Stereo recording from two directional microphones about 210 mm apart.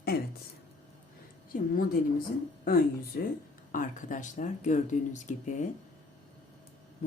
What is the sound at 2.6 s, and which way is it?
Speech, 45° left (ahead or behind).